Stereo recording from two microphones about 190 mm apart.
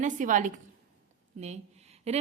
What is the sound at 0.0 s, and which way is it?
A woman's voice, 40° right (ahead or behind).